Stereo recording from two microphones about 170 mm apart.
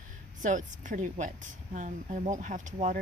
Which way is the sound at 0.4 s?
50° right (ahead or behind).